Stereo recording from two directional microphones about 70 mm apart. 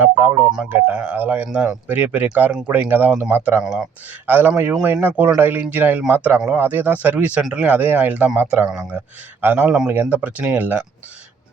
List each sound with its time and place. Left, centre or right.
0.0 s speech: right
1.5 s speech: centre
1.9 s speech: right
3.6 s speech: centre
4.3 s speech: right